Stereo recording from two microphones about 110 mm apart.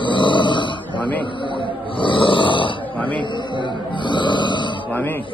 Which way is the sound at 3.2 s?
45° left (ahead or behind).